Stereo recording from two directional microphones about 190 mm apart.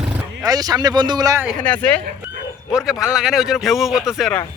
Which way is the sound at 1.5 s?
5° left (ahead or behind).